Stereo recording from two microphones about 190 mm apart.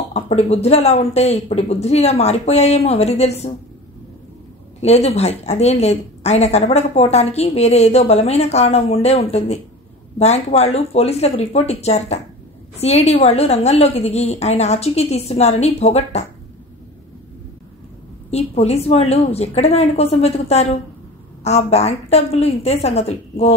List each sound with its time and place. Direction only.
0.1 s a woman's voice: 35° left (ahead or behind)
4.8 s a woman's voice: 35° left (ahead or behind)
18.3 s a woman's voice: 35° left (ahead or behind)